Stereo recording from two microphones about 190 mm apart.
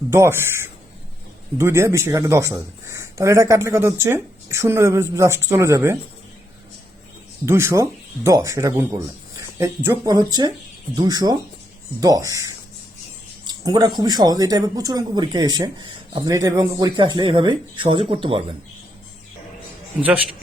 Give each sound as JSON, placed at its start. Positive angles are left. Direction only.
{"t": 0.1, "sound": "speech", "side_deg": -15}
{"t": 1.5, "sound": "speech", "side_deg": -15}
{"t": 7.4, "sound": "speech", "side_deg": -15}